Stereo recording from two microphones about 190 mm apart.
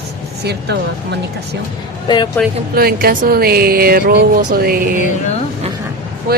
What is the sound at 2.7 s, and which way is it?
Speech, 50° right (ahead or behind).